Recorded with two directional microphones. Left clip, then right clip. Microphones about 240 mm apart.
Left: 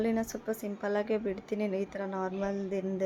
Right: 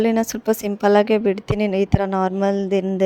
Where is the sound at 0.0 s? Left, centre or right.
Right.